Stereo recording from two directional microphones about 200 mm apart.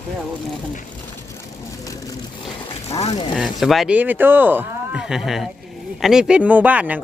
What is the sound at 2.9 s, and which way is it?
Speech, 30° left (ahead or behind).